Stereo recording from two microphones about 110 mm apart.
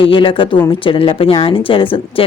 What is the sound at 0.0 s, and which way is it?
Speech, 50° left (ahead or behind).